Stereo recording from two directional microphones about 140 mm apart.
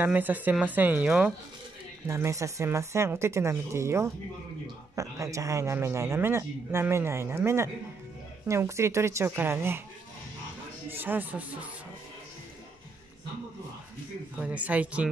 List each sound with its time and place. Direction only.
0.0 s speech: 10° right (ahead or behind)
2.0 s speech: 20° right (ahead or behind)
11.0 s speech: 15° right (ahead or behind)
14.4 s speech: 10° right (ahead or behind)